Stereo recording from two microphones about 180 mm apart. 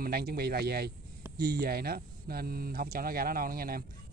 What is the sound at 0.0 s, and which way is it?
Speech, 60° right (ahead or behind).